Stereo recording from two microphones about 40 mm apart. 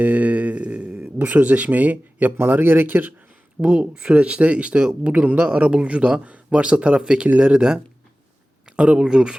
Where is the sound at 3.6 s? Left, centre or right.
Right.